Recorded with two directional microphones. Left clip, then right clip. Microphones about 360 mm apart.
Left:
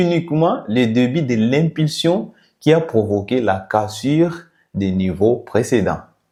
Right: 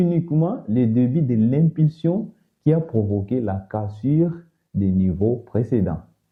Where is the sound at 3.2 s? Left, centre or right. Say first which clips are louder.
Left 8 dB; centre.